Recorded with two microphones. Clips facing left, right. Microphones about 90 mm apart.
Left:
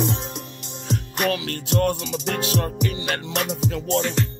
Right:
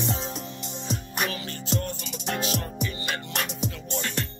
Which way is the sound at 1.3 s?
75° left (ahead or behind).